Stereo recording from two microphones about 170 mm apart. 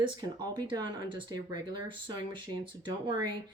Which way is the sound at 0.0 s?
25° right (ahead or behind).